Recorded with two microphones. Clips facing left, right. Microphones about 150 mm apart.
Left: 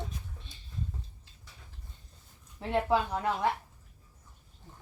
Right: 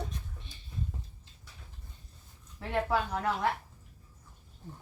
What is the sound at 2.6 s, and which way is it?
Speech, 20° left (ahead or behind).